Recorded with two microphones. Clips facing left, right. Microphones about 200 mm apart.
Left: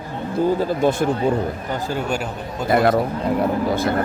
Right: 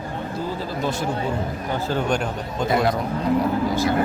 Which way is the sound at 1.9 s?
10° left (ahead or behind).